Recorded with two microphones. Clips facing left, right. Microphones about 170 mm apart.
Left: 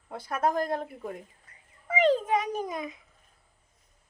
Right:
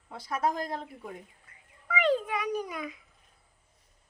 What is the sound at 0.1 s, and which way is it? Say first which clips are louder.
Speech: left 2 dB; 55° left (ahead or behind).